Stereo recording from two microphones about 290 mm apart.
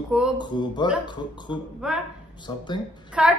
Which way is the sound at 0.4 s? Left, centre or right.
Centre.